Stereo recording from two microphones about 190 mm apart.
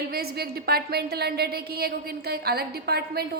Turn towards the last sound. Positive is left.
turn(degrees=-55)  # may be behind; listen again after turning